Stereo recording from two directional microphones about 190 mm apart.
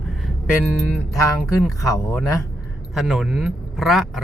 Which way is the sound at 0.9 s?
5° right (ahead or behind).